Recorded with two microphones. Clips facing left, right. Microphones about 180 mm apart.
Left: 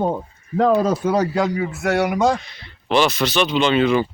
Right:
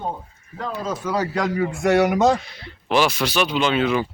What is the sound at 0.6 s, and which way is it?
Speech, 70° left (ahead or behind).